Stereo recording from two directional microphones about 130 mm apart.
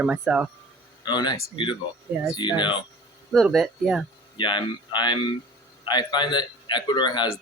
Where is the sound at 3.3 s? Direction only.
Centre (ahead or behind).